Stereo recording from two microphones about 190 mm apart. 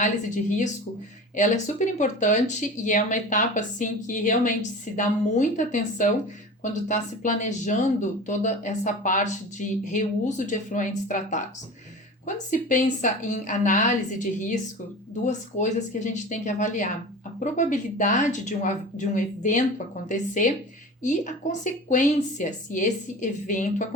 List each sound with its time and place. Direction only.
1.4 s speech: 40° left (ahead or behind)